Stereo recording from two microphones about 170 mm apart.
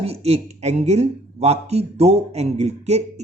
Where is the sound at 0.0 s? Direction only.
35° right (ahead or behind).